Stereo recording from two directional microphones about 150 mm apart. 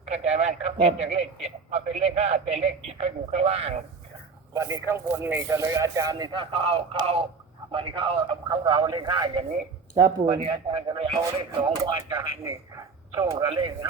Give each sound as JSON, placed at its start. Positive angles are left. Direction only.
{"t": 0.0, "sound": "a man's voice", "side_deg": -45}
{"t": 4.5, "sound": "speech", "side_deg": -20}
{"t": 10.4, "sound": "speech", "side_deg": -40}
{"t": 11.2, "sound": "speech", "side_deg": -25}